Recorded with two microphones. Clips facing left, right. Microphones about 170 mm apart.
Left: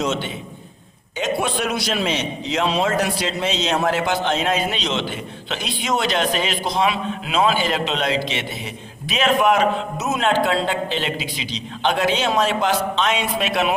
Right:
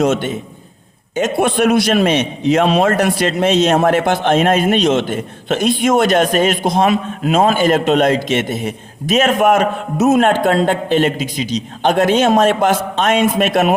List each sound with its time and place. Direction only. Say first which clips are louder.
0.0 s a man's voice: right 8 dB; 50° right (ahead or behind)